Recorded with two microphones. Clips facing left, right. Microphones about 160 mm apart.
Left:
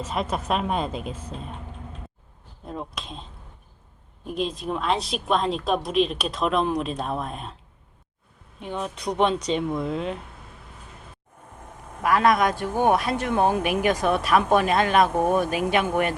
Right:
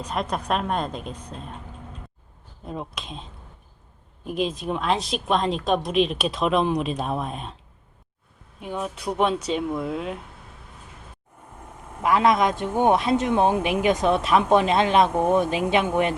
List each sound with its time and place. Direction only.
0.0 s speech: centre (ahead or behind)
2.6 s speech: centre (ahead or behind)
4.3 s speech: centre (ahead or behind)
8.6 s speech: 5° right (ahead or behind)
12.0 s speech: 20° right (ahead or behind)